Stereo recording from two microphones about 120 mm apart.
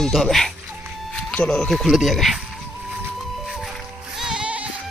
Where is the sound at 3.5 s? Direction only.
Centre (ahead or behind).